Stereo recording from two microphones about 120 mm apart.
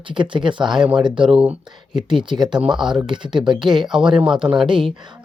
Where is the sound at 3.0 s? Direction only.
40° right (ahead or behind).